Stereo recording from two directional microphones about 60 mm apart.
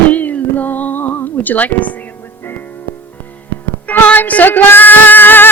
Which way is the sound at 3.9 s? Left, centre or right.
Left.